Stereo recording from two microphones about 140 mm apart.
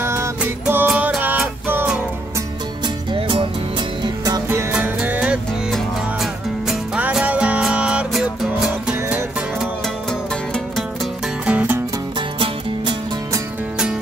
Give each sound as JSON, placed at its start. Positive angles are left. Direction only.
{"t": 0.0, "sound": "music", "side_deg": -20}
{"t": 3.1, "sound": "music", "side_deg": -35}
{"t": 4.0, "sound": "music", "side_deg": -25}
{"t": 6.7, "sound": "music", "side_deg": -5}
{"t": 11.4, "sound": "music", "side_deg": -10}